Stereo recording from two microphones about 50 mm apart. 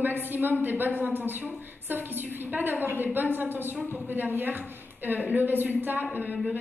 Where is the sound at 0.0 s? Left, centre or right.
Right.